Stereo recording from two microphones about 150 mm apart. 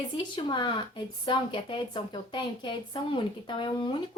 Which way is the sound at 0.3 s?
30° left (ahead or behind).